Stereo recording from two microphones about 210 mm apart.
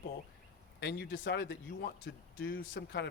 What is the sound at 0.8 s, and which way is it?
Speech, 55° left (ahead or behind).